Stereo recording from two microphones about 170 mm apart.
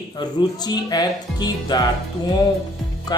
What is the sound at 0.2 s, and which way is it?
Speech, 25° left (ahead or behind).